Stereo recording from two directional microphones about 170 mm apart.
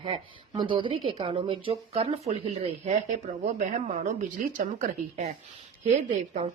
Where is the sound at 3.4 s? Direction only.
45° right (ahead or behind).